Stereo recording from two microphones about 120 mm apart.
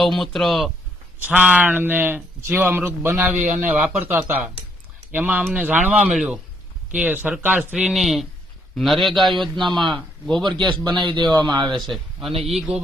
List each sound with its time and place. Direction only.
0.0 s a man's voice: centre (ahead or behind)
1.2 s a man's voice: 10° right (ahead or behind)
10.4 s a man's voice: 40° right (ahead or behind)
11.7 s a man's voice: centre (ahead or behind)